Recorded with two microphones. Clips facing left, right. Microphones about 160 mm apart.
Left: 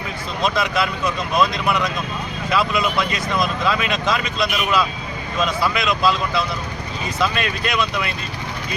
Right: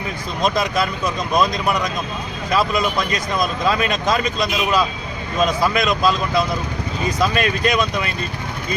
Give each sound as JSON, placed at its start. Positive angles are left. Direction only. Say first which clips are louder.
{"t": 0.4, "sound": "speech", "louder": "right 1 dB", "side_deg": -40}